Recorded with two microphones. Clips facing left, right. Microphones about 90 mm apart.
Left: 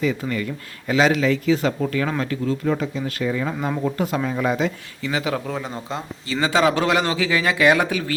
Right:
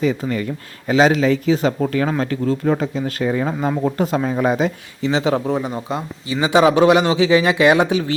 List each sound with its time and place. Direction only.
0.0 s speech: 30° right (ahead or behind)